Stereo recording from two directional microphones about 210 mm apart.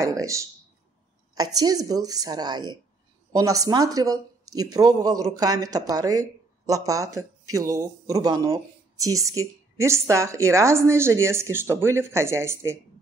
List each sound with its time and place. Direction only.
0.0 s a woman's voice: 15° right (ahead or behind)